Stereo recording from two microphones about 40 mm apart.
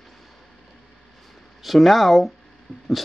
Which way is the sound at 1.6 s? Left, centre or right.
Centre.